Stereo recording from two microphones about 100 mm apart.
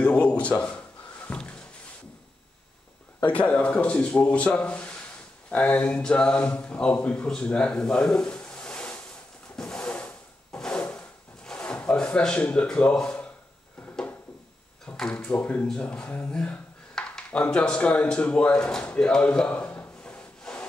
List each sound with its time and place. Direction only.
0.0 s a sound: 10° left (ahead or behind)
3.3 s speech: 15° left (ahead or behind)
9.6 s wood: 10° left (ahead or behind)
14.9 s speech: 10° left (ahead or behind)
20.5 s sawing: 5° left (ahead or behind)